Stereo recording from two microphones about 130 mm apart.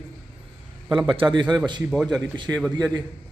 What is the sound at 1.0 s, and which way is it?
Speech, 35° right (ahead or behind).